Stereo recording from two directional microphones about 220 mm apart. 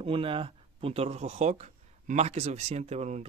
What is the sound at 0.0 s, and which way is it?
Speech, 25° right (ahead or behind).